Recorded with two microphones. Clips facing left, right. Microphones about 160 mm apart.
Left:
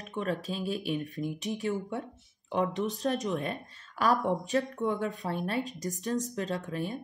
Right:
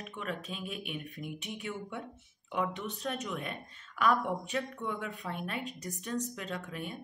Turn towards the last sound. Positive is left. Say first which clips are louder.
# left 6 dB
turn(degrees=35)  # may be behind; listen again after turning